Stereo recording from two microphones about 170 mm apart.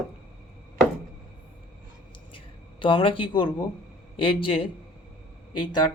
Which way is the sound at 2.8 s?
30° left (ahead or behind).